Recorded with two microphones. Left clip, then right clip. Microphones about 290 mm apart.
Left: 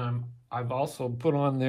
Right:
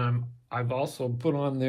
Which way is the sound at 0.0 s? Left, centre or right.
Centre.